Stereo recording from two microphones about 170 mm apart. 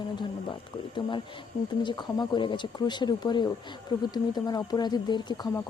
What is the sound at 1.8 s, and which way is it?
Speech, 25° left (ahead or behind).